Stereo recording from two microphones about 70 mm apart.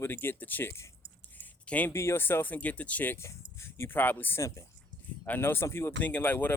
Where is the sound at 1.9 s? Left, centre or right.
Left.